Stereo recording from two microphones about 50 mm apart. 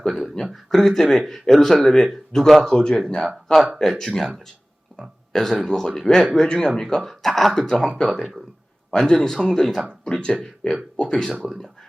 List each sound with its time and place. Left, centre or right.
0.5 s speech: centre
7.7 s speech: centre